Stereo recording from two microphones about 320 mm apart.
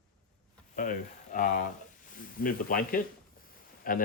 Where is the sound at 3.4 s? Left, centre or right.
Left.